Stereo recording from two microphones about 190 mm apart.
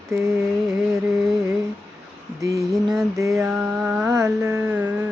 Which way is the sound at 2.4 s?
15° right (ahead or behind).